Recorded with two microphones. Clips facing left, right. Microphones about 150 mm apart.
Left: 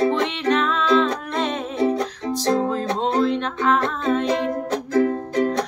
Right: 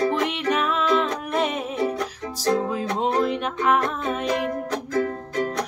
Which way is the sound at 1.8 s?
30° left (ahead or behind).